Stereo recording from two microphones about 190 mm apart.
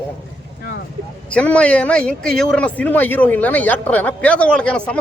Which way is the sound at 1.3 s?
5° left (ahead or behind).